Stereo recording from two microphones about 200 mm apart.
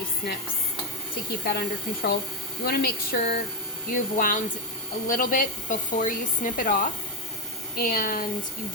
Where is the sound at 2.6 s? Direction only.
50° left (ahead or behind).